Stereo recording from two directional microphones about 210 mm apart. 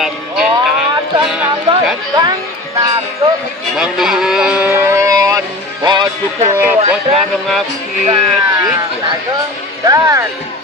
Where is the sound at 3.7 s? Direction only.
Centre (ahead or behind).